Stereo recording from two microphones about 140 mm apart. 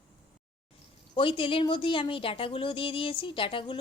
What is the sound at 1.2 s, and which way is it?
Speech, 40° left (ahead or behind).